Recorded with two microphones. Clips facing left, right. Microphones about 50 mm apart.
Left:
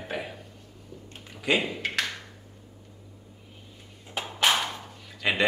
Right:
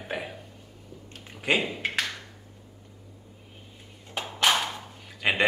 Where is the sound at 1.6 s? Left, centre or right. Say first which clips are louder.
Right 1 dB; centre.